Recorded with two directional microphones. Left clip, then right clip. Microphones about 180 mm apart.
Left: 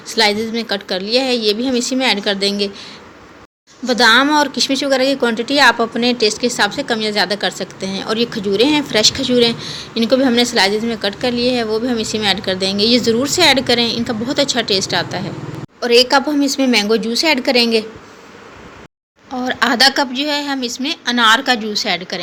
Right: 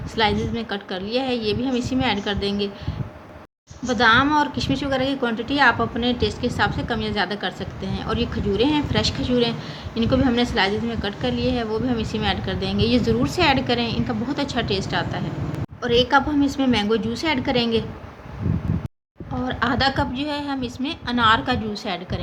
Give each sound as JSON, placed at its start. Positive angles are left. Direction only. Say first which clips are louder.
{"t": 0.1, "sound": "a woman's voice", "louder": "left 6 dB", "side_deg": 15}
{"t": 3.8, "sound": "a woman's voice", "louder": "left 5 dB", "side_deg": 20}
{"t": 19.4, "sound": "a woman's voice", "louder": "left 8 dB", "side_deg": 15}